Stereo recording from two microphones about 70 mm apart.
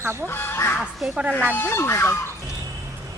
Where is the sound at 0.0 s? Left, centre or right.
Right.